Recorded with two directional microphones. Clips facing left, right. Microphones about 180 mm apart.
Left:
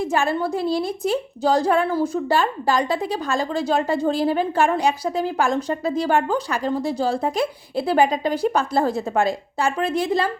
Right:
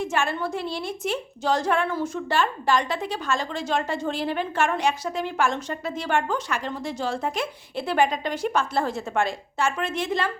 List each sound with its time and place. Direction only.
0.0 s a woman's voice: 35° left (ahead or behind)